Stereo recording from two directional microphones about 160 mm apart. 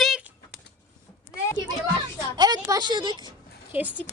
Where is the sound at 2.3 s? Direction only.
25° right (ahead or behind).